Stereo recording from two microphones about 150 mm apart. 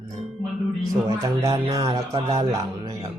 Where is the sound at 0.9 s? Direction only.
25° right (ahead or behind).